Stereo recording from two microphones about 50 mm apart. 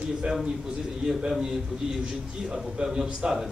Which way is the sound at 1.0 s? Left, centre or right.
Centre.